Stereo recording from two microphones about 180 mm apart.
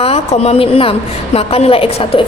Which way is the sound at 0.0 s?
35° left (ahead or behind).